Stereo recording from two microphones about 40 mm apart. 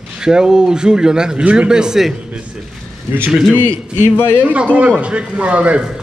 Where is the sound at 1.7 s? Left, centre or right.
Centre.